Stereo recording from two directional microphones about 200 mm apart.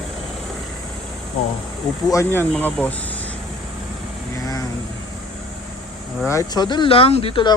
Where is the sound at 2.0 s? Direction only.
15° left (ahead or behind).